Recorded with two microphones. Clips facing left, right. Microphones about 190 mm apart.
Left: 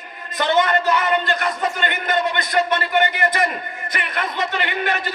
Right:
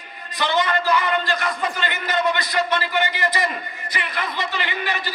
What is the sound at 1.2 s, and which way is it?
A man's voice, 60° left (ahead or behind).